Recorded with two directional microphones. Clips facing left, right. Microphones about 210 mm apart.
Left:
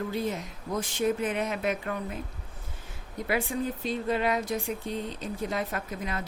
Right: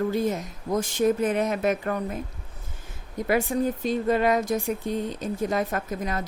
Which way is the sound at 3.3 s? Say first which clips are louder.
Right 6 dB; 45° right (ahead or behind).